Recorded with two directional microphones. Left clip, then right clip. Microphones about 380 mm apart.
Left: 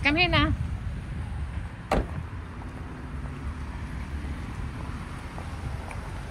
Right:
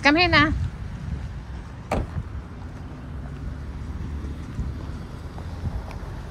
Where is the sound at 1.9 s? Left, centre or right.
Left.